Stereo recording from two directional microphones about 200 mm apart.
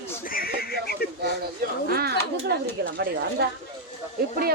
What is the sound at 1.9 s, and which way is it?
Speech, 50° right (ahead or behind).